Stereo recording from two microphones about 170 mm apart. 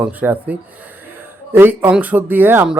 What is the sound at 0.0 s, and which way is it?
Speech, 10° right (ahead or behind).